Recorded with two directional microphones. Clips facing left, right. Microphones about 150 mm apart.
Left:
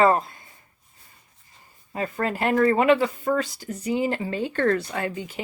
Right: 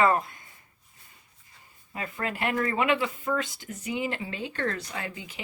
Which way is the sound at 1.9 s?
35° left (ahead or behind).